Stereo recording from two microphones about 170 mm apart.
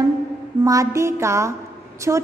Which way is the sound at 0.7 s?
20° right (ahead or behind).